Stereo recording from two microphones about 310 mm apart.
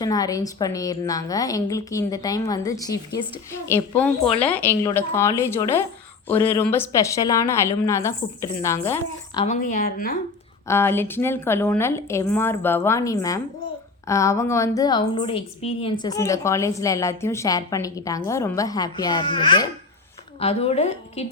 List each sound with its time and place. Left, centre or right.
0.0 s a woman's voice: centre; by 10.2 s left
10.7 s a woman's voice: centre